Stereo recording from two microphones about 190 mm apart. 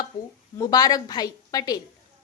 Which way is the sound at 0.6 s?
20° left (ahead or behind).